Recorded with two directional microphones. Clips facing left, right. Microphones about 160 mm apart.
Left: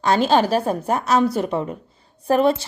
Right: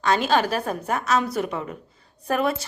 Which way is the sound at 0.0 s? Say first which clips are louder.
Left 4 dB; 30° left (ahead or behind).